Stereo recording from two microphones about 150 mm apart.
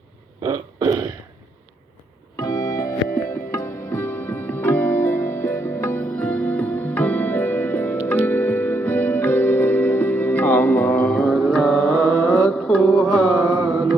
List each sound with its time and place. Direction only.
2.3 s music: 25° left (ahead or behind); by 11.9 s centre (ahead or behind)
12.0 s mantra: 15° left (ahead or behind)
12.5 s mantra: 5° left (ahead or behind)